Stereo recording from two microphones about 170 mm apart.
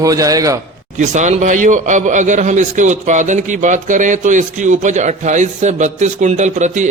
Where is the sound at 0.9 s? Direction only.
45° right (ahead or behind).